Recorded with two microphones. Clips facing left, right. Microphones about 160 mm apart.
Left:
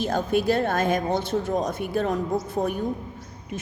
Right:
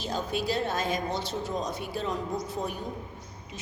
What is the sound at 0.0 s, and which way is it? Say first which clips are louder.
A woman's voice: left 8 dB; 55° left (ahead or behind).